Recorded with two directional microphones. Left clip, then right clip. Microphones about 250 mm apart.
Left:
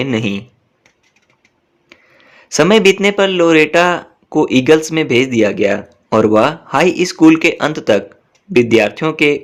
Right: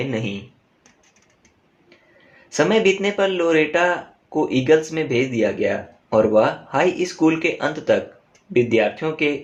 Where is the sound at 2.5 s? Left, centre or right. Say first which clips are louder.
Left 7 dB; left.